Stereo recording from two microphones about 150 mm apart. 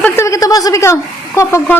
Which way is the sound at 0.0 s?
20° left (ahead or behind).